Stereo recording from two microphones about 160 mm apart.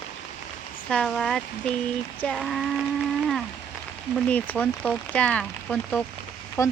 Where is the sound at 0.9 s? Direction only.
5° left (ahead or behind).